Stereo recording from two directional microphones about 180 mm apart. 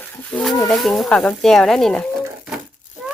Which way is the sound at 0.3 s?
5° left (ahead or behind).